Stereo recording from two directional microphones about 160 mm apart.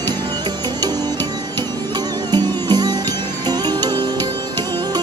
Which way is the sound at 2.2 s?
25° right (ahead or behind).